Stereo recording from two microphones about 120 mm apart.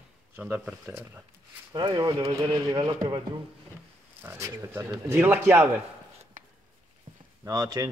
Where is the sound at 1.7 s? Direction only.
40° right (ahead or behind).